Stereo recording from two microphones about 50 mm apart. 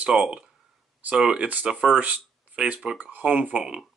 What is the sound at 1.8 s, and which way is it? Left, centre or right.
Speech, centre.